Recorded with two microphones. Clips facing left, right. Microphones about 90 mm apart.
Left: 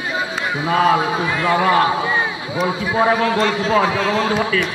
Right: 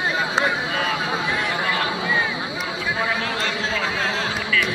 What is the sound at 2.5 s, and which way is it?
A man's voice, 40° left (ahead or behind).